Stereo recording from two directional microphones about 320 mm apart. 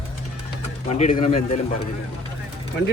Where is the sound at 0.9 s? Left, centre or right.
Left.